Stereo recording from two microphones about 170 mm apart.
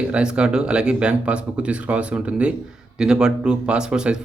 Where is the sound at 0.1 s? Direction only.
5° right (ahead or behind).